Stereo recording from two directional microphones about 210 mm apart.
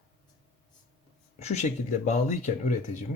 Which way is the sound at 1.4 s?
30° left (ahead or behind).